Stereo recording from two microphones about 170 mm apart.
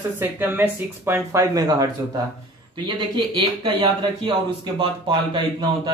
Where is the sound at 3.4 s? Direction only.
30° right (ahead or behind).